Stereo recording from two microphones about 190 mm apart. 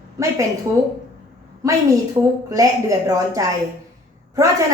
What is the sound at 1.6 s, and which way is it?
Speech, 15° right (ahead or behind).